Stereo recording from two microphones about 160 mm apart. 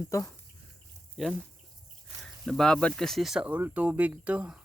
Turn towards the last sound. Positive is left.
turn(degrees=-5)  # may be behind; listen again after turning